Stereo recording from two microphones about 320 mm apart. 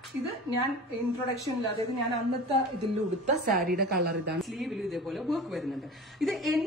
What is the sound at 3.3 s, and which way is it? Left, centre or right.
A woman's voice, right.